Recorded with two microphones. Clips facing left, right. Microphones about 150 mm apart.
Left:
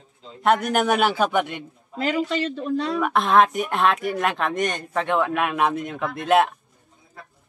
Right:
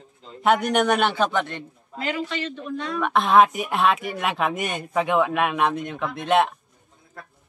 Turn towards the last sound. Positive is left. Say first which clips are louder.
# left 1 dB
turn(degrees=0)  # may be behind; listen again after turning